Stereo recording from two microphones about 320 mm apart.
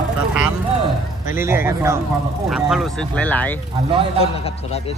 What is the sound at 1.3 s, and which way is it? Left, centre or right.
A man's voice, centre.